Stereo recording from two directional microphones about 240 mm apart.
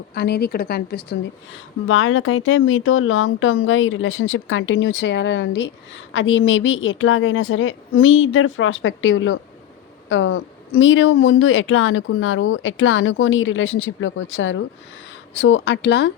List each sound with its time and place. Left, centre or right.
0.1 s a woman's voice: left
1.9 s a woman's voice: left